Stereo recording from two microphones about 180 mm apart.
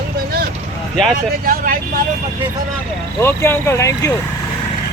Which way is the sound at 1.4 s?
50° right (ahead or behind).